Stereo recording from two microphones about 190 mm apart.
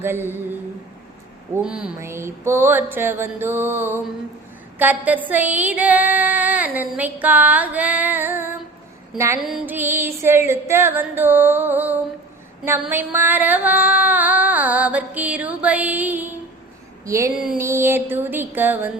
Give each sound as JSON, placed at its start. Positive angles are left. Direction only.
{"t": 0.0, "sound": "female singing", "side_deg": -10}
{"t": 1.5, "sound": "female singing", "side_deg": -5}